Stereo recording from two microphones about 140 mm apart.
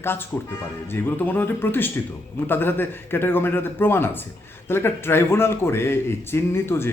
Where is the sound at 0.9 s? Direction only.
15° left (ahead or behind).